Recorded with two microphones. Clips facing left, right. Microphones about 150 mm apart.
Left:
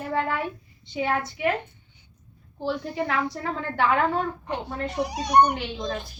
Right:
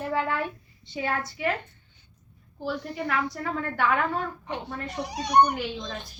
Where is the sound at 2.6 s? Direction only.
30° left (ahead or behind).